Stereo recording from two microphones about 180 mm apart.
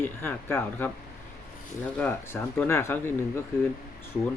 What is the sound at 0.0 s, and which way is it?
Speech, 10° left (ahead or behind).